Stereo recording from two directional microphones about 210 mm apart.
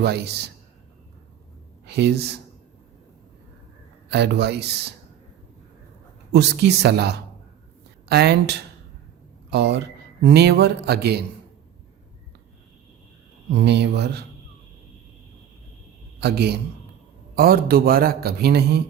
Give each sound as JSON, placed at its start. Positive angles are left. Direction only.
{"t": 0.0, "sound": "a man's voice", "side_deg": -50}
{"t": 1.9, "sound": "a man's voice", "side_deg": -50}
{"t": 4.1, "sound": "a man's voice", "side_deg": -50}
{"t": 6.3, "sound": "a man's voice", "side_deg": -55}
{"t": 13.6, "sound": "a man's voice", "side_deg": -55}
{"t": 16.2, "sound": "a man's voice", "side_deg": -50}